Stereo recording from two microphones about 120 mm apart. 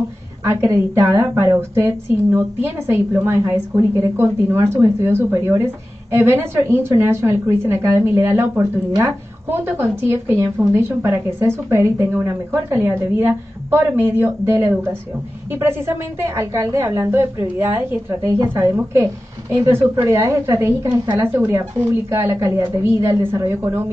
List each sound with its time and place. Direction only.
0.4 s a woman's voice: 20° right (ahead or behind)
21.2 s a woman's voice: 20° right (ahead or behind)